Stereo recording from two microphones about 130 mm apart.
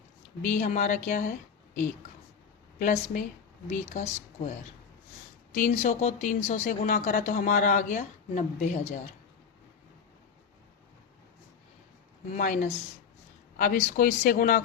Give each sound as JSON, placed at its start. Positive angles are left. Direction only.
{"t": 0.4, "sound": "speech", "side_deg": 75}
{"t": 5.5, "sound": "speech", "side_deg": 85}
{"t": 12.3, "sound": "speech", "side_deg": 90}